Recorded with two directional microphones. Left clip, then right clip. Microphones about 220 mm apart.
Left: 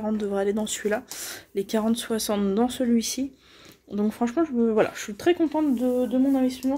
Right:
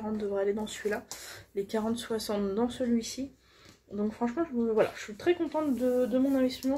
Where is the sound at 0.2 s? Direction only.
50° left (ahead or behind).